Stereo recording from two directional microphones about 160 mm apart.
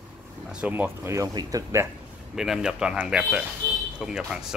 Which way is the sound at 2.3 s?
5° right (ahead or behind).